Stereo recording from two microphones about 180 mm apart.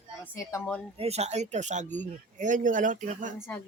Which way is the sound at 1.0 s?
35° right (ahead or behind).